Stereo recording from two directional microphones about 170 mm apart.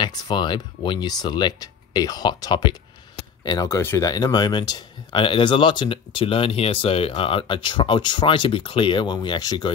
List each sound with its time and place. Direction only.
0.0 s speech: 25° left (ahead or behind)